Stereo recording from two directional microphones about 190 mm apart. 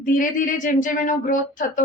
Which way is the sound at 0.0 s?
45° left (ahead or behind).